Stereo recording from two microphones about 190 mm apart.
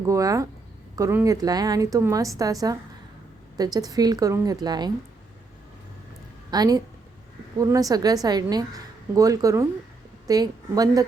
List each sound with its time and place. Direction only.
0.0 s a woman's voice: 15° right (ahead or behind)
6.5 s a woman's voice: 20° right (ahead or behind)